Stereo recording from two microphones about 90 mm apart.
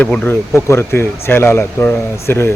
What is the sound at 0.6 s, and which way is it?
Speech, 30° left (ahead or behind).